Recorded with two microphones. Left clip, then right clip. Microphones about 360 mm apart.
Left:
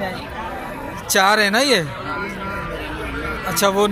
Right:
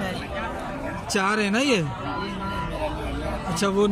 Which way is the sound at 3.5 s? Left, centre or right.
Centre.